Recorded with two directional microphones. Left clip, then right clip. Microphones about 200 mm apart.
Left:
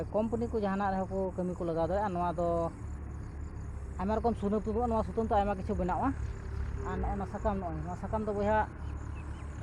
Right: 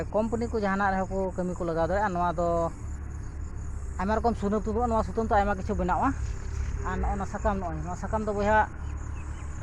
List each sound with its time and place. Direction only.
0.0 s speech: 25° right (ahead or behind)
3.9 s speech: 20° right (ahead or behind)